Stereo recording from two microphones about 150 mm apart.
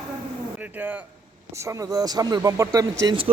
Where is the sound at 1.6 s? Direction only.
25° right (ahead or behind).